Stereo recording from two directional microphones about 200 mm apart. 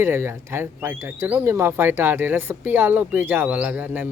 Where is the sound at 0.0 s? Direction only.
10° right (ahead or behind).